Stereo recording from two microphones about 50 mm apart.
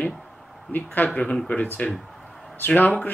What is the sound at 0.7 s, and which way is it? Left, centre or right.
Speech, left.